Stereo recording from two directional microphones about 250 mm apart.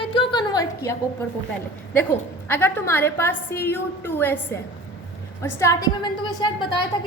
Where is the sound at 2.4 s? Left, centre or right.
Centre.